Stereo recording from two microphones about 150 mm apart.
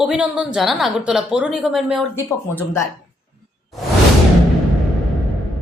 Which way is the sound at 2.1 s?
15° left (ahead or behind).